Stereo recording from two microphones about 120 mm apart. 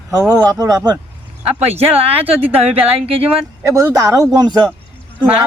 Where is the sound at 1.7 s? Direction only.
55° right (ahead or behind).